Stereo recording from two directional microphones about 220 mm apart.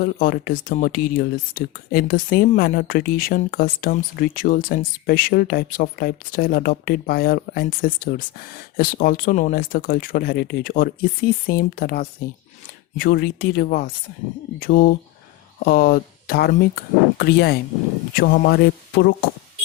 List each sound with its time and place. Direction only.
0.0 s speech: 40° left (ahead or behind)